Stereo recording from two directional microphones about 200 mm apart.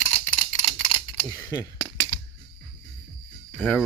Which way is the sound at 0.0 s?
40° left (ahead or behind).